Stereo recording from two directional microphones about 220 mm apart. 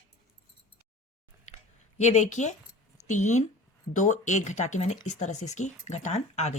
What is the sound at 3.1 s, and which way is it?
Speech, 35° left (ahead or behind).